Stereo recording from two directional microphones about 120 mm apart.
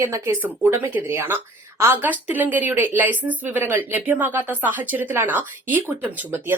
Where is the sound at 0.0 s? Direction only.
20° right (ahead or behind).